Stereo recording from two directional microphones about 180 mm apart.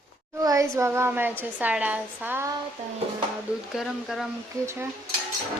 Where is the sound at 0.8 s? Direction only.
15° right (ahead or behind).